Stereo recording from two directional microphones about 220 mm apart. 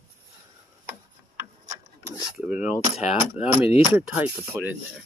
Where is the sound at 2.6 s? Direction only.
30° left (ahead or behind).